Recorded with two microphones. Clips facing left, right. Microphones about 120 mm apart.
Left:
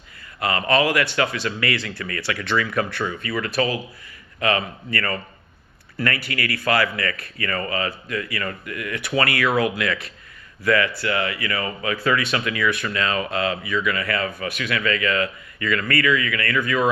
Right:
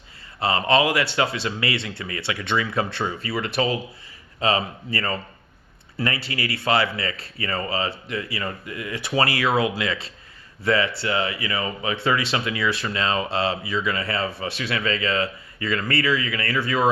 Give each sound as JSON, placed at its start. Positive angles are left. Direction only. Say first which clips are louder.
{"t": 0.3, "sound": "speech", "louder": "even", "side_deg": -25}